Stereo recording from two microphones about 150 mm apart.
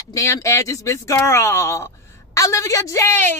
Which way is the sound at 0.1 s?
20° left (ahead or behind).